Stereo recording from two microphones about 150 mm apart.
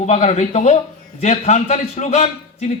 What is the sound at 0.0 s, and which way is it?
A man's voice, 50° left (ahead or behind).